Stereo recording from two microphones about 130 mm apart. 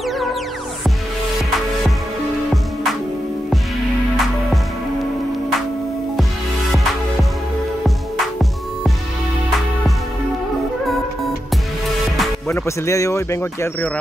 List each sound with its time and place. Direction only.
6.7 s music: centre (ahead or behind)
12.4 s speech: 20° left (ahead or behind)